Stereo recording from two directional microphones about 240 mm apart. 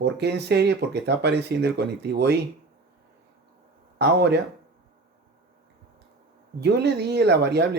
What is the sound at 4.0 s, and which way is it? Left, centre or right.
Speech, right.